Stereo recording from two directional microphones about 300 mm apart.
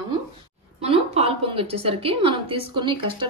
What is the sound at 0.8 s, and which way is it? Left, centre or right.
A woman's voice, centre.